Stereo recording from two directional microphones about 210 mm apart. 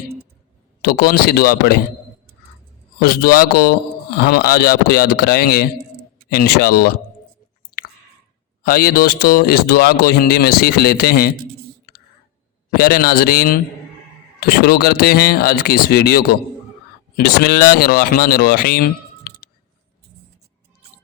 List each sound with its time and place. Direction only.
0.8 s speech: 45° left (ahead or behind)
3.0 s speech: 45° left (ahead or behind)
8.6 s speech: 45° left (ahead or behind)
12.7 s speech: 45° left (ahead or behind)